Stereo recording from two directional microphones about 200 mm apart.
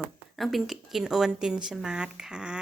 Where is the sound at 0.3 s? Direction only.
Centre (ahead or behind).